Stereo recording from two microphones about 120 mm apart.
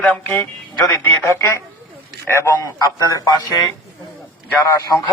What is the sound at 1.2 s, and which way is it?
A man's voice, 25° left (ahead or behind).